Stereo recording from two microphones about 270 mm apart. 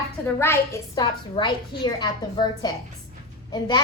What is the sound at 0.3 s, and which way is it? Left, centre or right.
A woman's voice, centre.